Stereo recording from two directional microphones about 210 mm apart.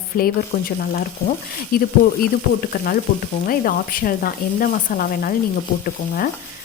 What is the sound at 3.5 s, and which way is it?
Speech, 45° left (ahead or behind).